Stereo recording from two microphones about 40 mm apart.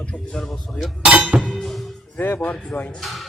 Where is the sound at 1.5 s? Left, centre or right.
Centre.